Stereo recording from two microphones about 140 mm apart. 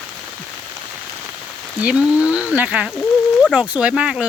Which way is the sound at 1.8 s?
10° right (ahead or behind).